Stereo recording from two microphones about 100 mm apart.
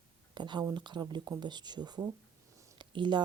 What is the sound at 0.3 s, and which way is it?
Speech, 50° right (ahead or behind).